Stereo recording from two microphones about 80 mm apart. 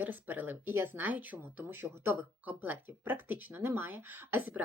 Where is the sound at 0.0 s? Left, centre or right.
Right.